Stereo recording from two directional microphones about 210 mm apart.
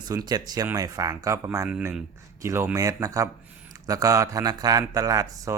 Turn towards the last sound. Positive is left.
turn(degrees=-15)  # may be behind; listen again after turning